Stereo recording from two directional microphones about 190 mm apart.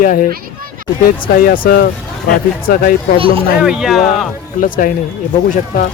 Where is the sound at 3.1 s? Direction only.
30° right (ahead or behind).